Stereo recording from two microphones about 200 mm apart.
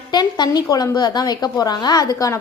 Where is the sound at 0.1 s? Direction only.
20° left (ahead or behind).